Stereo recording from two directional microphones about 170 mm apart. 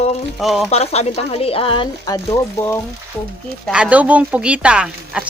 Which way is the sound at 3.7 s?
5° right (ahead or behind).